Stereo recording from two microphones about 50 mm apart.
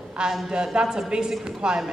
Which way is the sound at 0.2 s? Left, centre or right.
Centre.